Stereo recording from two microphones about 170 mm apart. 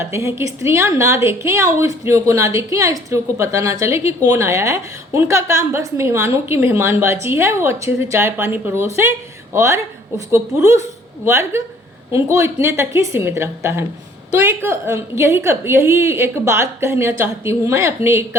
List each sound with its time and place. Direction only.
0.0 s a woman's voice: 15° right (ahead or behind)